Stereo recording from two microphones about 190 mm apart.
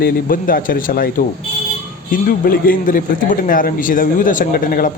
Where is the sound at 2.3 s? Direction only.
45° left (ahead or behind).